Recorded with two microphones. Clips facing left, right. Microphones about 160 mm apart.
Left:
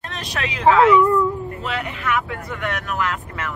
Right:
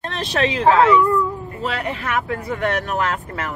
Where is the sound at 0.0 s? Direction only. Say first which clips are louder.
Right 7 dB; 30° right (ahead or behind).